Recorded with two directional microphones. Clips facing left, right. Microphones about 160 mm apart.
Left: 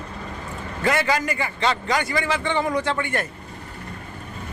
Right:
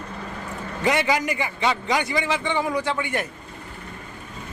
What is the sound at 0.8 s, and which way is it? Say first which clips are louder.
A man's voice: even; 15° right (ahead or behind).